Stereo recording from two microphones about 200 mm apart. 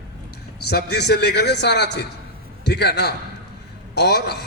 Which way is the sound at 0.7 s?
55° left (ahead or behind).